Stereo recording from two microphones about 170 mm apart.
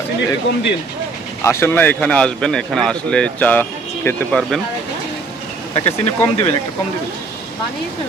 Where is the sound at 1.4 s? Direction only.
15° left (ahead or behind).